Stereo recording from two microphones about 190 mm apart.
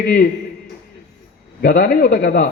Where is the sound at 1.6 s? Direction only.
55° left (ahead or behind).